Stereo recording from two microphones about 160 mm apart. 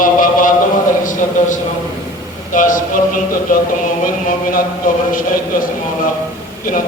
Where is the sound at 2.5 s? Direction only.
55° left (ahead or behind).